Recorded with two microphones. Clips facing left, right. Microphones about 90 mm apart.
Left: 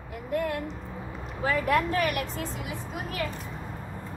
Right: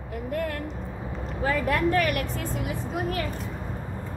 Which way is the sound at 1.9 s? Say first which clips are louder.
Right 3 dB; 50° right (ahead or behind).